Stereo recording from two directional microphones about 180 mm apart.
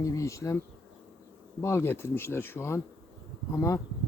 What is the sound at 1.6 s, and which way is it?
Speech, 15° left (ahead or behind).